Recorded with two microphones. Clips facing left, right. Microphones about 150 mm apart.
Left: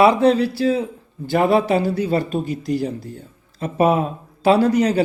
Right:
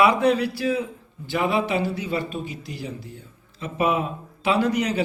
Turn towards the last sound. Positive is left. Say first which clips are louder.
# left 6 dB
turn(degrees=35)  # may be behind; listen again after turning